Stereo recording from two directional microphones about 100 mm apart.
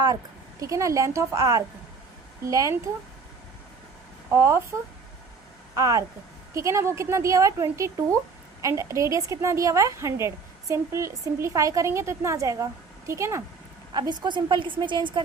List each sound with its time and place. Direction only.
0.6 s a woman's voice: 35° right (ahead or behind)
4.4 s speech: 30° right (ahead or behind)
5.7 s a woman's voice: 35° right (ahead or behind)
13.9 s a woman's voice: 50° right (ahead or behind)